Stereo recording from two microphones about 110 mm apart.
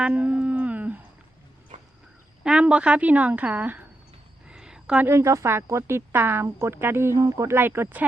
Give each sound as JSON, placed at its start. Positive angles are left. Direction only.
{"t": 0.0, "sound": "howl", "side_deg": -10}
{"t": 2.4, "sound": "speech", "side_deg": -10}
{"t": 4.4, "sound": "a sound", "side_deg": -5}
{"t": 5.0, "sound": "speech", "side_deg": -25}